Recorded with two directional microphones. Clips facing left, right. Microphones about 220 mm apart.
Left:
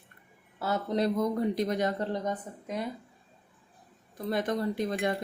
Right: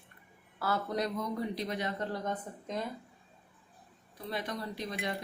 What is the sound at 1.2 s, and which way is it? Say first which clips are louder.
Speech: left 7 dB; 45° left (ahead or behind).